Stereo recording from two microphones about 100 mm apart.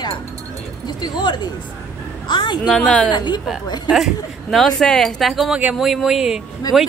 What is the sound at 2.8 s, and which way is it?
Speech, 10° left (ahead or behind).